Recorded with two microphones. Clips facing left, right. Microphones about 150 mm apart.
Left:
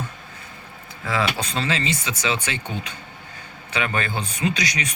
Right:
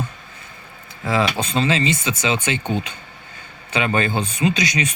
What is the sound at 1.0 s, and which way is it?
A man's voice, 25° right (ahead or behind).